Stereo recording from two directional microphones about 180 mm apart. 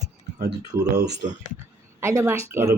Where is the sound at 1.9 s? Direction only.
15° right (ahead or behind).